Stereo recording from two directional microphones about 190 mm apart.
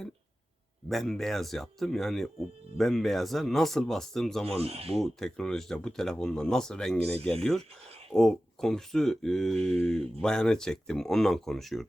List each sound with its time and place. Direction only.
0.9 s speech: centre (ahead or behind)
4.4 s speech: 30° right (ahead or behind)
4.9 s speech: centre (ahead or behind)